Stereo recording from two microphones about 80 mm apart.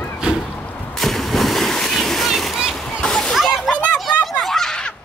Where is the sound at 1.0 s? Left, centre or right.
Centre.